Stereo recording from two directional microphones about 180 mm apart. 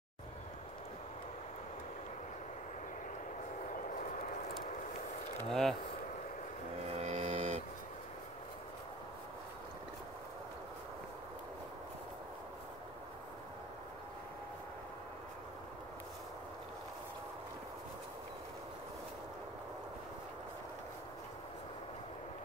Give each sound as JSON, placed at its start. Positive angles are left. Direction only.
{"t": 4.0, "sound": "vehicle", "side_deg": 45}
{"t": 5.5, "sound": "speech", "side_deg": 0}
{"t": 7.0, "sound": "music", "side_deg": -35}